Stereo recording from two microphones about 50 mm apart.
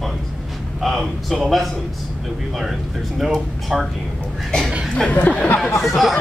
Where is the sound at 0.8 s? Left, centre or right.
Centre.